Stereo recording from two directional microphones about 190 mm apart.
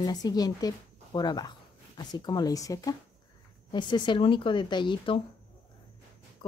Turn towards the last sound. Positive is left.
turn(degrees=25)  # may be behind; listen again after turning